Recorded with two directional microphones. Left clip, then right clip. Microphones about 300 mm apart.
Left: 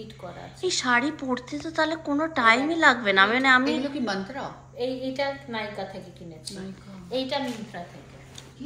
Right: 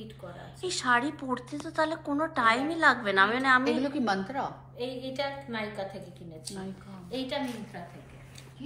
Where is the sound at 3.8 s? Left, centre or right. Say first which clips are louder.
Even; right.